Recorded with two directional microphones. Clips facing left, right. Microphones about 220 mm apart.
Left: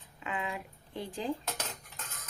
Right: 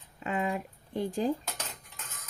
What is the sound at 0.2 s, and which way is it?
Speech, 40° right (ahead or behind).